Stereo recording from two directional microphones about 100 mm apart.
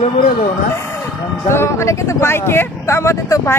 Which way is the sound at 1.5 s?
25° left (ahead or behind).